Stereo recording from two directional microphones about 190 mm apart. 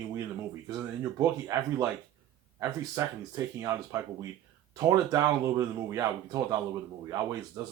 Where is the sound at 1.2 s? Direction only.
20° right (ahead or behind).